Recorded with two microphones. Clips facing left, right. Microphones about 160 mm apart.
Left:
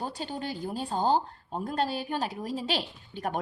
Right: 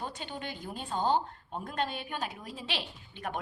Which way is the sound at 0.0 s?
35° left (ahead or behind).